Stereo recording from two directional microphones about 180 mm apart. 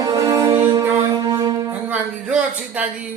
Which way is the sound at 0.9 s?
15° right (ahead or behind).